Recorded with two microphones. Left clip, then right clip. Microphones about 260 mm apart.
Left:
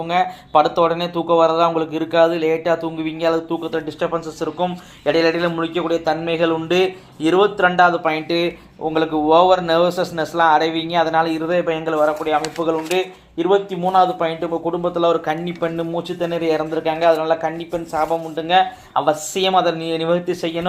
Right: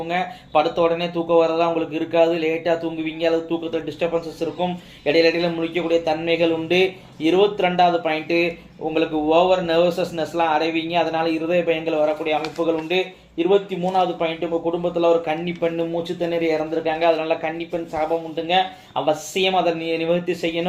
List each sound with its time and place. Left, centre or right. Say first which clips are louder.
0.1 s speech: left 5 dB; left